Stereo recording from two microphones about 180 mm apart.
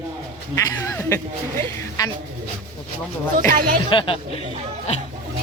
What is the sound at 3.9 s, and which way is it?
Speech, 30° left (ahead or behind).